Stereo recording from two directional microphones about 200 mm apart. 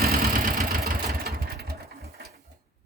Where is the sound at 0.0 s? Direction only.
50° right (ahead or behind).